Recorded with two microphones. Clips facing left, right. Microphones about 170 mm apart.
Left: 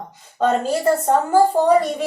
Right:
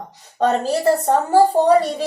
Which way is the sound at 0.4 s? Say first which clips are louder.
Right 1 dB; 35° right (ahead or behind).